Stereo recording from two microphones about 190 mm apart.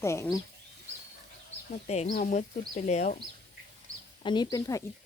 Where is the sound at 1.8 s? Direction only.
35° left (ahead or behind).